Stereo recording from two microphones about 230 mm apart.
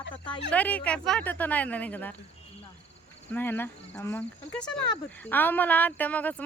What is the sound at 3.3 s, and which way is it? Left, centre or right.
Speech, centre.